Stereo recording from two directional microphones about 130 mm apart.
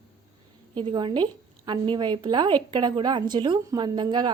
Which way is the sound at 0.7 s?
40° right (ahead or behind).